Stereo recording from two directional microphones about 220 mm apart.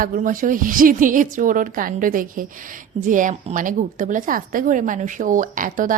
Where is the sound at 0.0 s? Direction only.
40° right (ahead or behind).